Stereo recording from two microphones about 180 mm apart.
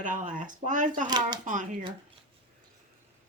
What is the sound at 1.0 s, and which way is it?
Speech, 25° right (ahead or behind).